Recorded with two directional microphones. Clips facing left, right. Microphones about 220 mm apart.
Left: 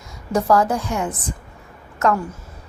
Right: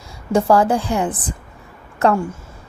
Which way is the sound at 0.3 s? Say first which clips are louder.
Right 3 dB; 30° right (ahead or behind).